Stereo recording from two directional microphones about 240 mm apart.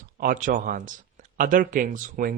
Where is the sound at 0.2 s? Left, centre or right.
Right.